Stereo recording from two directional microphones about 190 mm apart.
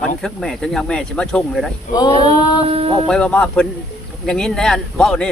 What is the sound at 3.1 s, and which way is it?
Speech, 5° left (ahead or behind).